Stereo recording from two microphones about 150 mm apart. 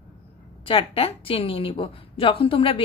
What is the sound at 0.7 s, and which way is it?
A woman's voice, 40° left (ahead or behind).